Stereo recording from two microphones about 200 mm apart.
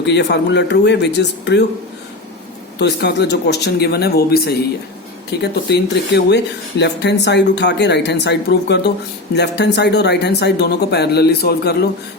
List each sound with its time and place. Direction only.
0.0 s speech: 60° left (ahead or behind)
2.7 s speech: 55° left (ahead or behind)